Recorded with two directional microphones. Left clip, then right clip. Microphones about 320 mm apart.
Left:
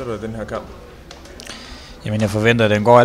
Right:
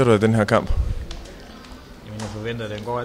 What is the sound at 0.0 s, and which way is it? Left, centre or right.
Speech, right.